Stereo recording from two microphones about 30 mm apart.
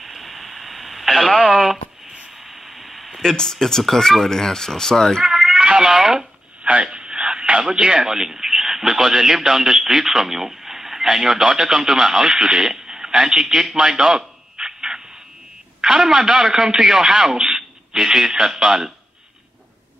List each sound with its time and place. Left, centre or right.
0.0 s radio: centre
1.5 s a sound: centre
2.8 s a sound: centre
3.2 s speech: left
5.2 s cat: centre
5.9 s a man's voice: centre
6.6 s radio: right
8.1 s a man's voice: centre
13.7 s a sound: right
15.8 s a man's voice: centre